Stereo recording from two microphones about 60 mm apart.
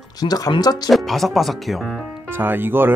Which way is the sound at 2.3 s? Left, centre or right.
Right.